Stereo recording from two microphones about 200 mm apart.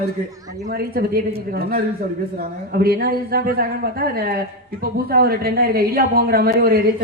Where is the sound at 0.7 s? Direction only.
50° right (ahead or behind).